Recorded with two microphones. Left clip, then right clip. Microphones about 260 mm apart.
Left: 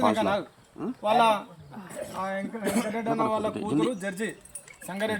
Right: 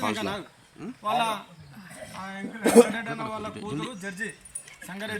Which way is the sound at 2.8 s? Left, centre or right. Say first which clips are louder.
Right 7 dB; left.